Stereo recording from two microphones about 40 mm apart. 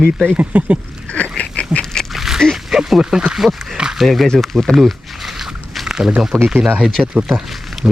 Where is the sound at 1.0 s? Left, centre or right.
Left.